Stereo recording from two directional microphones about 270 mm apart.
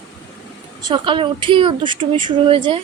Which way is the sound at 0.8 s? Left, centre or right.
Centre.